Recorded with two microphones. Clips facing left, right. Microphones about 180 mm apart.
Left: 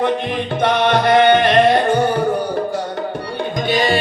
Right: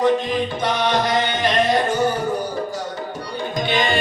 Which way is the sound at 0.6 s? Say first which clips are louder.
Left 8 dB; 60° left (ahead or behind).